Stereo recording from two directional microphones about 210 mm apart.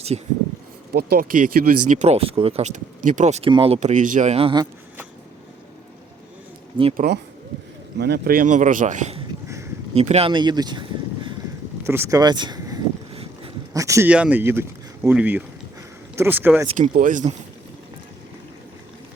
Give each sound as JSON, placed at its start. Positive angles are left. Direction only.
{"t": 0.1, "sound": "speech", "side_deg": -25}
{"t": 0.9, "sound": "speech", "side_deg": -45}
{"t": 1.9, "sound": "speech", "side_deg": -30}
{"t": 6.9, "sound": "speech", "side_deg": -45}
{"t": 11.9, "sound": "a sound", "side_deg": -15}
{"t": 13.7, "sound": "speech", "side_deg": -15}
{"t": 16.6, "sound": "speech", "side_deg": -35}